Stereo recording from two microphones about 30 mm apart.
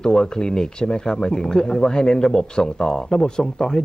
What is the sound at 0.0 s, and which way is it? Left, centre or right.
Speech, left.